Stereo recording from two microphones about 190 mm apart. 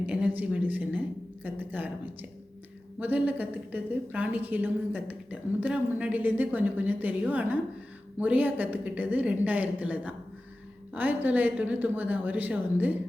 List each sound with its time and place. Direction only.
0.0 s a woman's voice: 10° right (ahead or behind)
3.0 s a woman's voice: 10° right (ahead or behind)